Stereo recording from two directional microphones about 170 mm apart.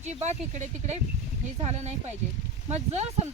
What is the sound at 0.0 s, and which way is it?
A woman's voice, 40° right (ahead or behind).